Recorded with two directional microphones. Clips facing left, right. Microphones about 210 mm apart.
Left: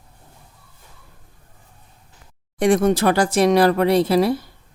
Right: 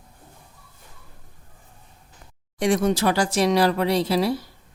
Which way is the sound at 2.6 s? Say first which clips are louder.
Left 4 dB; 55° left (ahead or behind).